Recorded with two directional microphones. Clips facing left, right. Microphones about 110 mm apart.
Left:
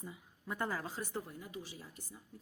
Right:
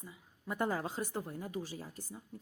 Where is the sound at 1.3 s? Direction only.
45° right (ahead or behind).